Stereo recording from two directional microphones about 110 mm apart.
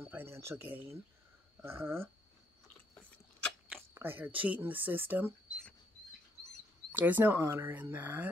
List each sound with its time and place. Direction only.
0.0 s speech: 20° right (ahead or behind)
1.6 s a sound: 20° right (ahead or behind)
3.9 s speech: 20° right (ahead or behind)
6.9 s speech: 15° right (ahead or behind)